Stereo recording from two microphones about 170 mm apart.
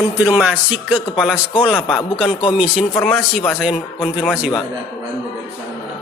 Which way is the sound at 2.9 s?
5° left (ahead or behind).